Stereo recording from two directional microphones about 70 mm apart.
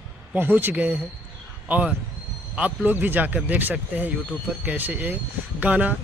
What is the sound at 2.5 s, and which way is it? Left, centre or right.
Speech, centre.